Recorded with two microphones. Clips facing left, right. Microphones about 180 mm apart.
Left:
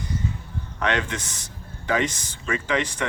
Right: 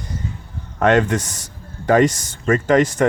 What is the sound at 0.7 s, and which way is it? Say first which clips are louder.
Speech: right 10 dB; 45° right (ahead or behind).